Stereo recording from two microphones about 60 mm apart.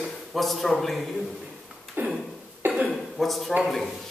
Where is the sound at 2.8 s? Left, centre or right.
Centre.